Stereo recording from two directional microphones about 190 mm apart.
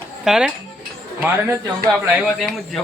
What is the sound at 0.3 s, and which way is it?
Speech, 5° right (ahead or behind).